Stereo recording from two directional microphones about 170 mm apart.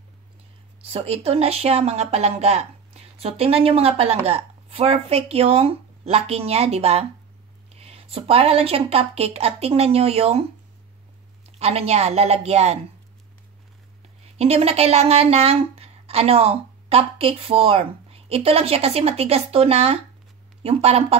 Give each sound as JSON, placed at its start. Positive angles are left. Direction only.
{"t": 0.8, "sound": "speech", "side_deg": -35}
{"t": 11.5, "sound": "speech", "side_deg": -35}
{"t": 14.2, "sound": "speech", "side_deg": -35}